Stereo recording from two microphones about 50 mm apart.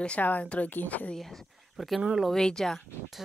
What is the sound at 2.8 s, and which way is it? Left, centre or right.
Speech, centre.